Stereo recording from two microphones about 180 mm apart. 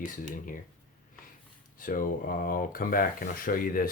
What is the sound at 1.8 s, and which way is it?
Speech, 50° left (ahead or behind).